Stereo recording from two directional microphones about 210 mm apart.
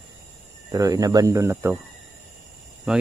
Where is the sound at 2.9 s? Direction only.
5° right (ahead or behind).